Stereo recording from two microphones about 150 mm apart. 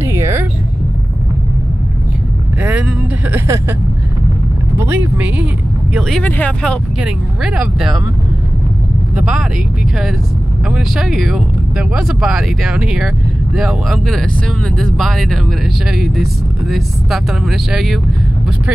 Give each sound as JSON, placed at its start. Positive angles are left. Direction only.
{"t": 0.0, "sound": "a sound", "side_deg": -15}
{"t": 3.3, "sound": "speech", "side_deg": -20}
{"t": 4.7, "sound": "speech", "side_deg": -15}
{"t": 5.9, "sound": "speech", "side_deg": 0}
{"t": 7.0, "sound": "speech", "side_deg": -5}
{"t": 9.1, "sound": "speech", "side_deg": -5}
{"t": 10.7, "sound": "speech", "side_deg": 0}